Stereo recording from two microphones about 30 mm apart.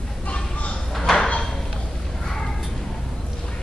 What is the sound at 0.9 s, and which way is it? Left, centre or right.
Sliding door, centre.